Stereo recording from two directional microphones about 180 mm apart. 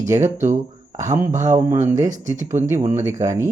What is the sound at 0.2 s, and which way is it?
Speech, 40° right (ahead or behind).